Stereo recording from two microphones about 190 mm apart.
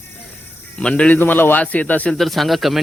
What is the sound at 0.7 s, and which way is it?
A man's voice, 5° left (ahead or behind).